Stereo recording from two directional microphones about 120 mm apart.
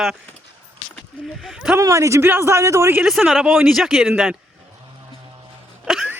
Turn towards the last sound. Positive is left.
turn(degrees=-5)  # may be behind; listen again after turning